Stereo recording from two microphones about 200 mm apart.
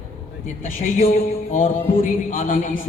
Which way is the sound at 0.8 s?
40° left (ahead or behind).